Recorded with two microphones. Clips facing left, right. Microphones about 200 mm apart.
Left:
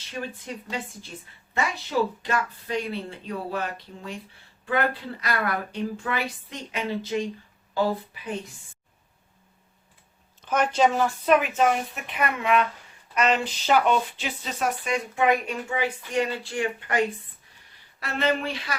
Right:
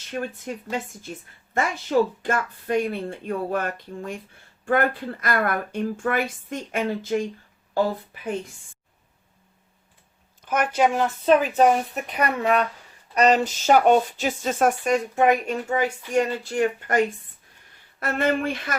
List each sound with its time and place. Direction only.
0.1 s speech: 50° right (ahead or behind)
10.4 s speech: 10° right (ahead or behind)
11.3 s a woman's voice: 35° right (ahead or behind)
18.0 s speech: 50° right (ahead or behind)